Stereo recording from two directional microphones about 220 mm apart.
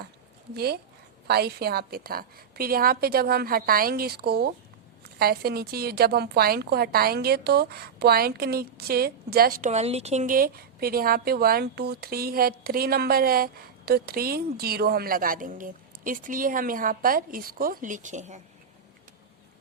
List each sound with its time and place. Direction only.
0.5 s a woman's voice: 45° right (ahead or behind)